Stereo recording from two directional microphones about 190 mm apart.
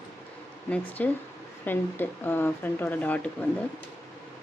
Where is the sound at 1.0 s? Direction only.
5° left (ahead or behind).